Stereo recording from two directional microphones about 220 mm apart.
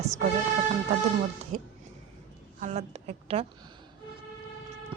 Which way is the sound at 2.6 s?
30° right (ahead or behind).